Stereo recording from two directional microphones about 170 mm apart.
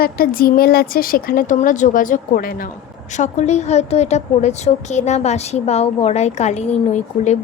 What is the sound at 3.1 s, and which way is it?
A woman's voice, 45° left (ahead or behind).